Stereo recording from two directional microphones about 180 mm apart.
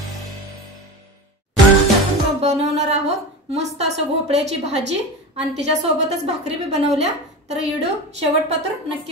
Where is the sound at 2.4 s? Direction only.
40° right (ahead or behind).